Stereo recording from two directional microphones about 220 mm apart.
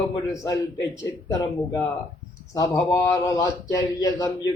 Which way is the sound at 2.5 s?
15° left (ahead or behind).